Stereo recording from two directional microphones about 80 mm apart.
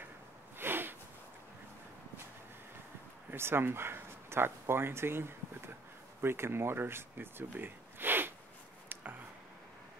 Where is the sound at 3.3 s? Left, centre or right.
Right.